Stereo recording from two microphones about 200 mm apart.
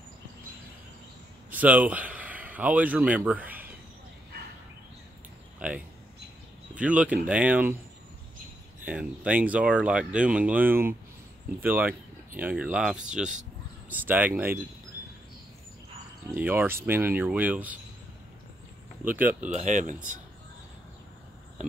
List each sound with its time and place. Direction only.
1.5 s speech: 10° right (ahead or behind)
6.7 s speech: 5° right (ahead or behind)
8.8 s speech: 5° right (ahead or behind)
16.3 s speech: 10° right (ahead or behind)
19.5 s speech: 35° right (ahead or behind)